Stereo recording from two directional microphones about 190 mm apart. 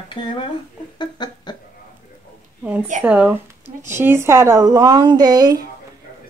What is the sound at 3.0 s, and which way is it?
Speech, 5° right (ahead or behind).